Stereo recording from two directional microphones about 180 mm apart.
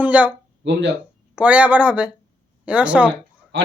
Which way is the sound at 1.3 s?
5° right (ahead or behind).